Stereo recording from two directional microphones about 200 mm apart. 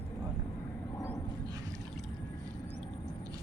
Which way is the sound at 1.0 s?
15° left (ahead or behind).